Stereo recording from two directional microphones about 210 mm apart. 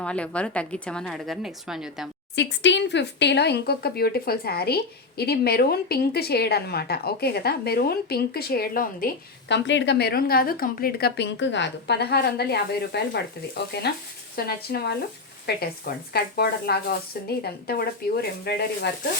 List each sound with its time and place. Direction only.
0.0 s a woman's voice: 5° left (ahead or behind)
2.3 s speech: 60° left (ahead or behind)
9.5 s speech: 55° left (ahead or behind)